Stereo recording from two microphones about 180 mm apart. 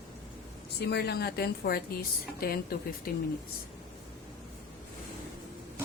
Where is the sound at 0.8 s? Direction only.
65° left (ahead or behind).